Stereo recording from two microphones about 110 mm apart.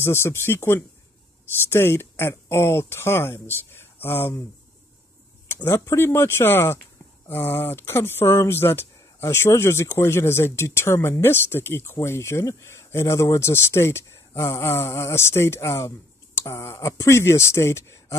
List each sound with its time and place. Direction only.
0.0 s speech: 20° left (ahead or behind)
5.5 s speech: 20° left (ahead or behind)